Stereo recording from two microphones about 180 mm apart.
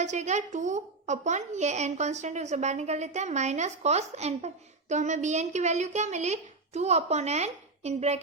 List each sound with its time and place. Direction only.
0.0 s a woman's voice: 40° right (ahead or behind)